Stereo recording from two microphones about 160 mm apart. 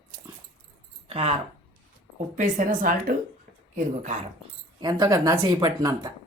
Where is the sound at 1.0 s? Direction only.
35° right (ahead or behind).